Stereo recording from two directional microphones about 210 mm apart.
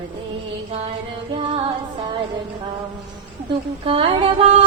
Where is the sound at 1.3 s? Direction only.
25° right (ahead or behind).